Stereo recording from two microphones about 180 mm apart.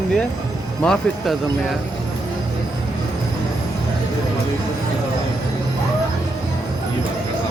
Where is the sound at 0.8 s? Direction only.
5° left (ahead or behind).